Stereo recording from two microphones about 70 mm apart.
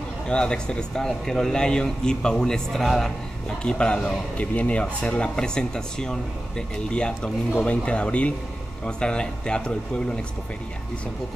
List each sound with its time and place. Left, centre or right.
0.3 s speech: centre